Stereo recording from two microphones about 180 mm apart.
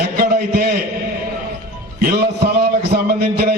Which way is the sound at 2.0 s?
60° right (ahead or behind).